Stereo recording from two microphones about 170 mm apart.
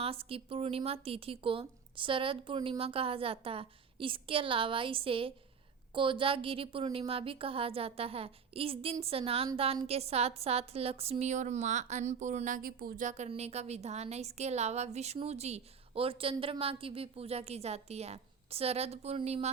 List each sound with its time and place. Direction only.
0.0 s a woman's voice: 35° right (ahead or behind)